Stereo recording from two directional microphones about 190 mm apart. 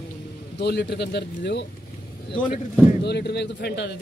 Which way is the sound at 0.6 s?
60° left (ahead or behind).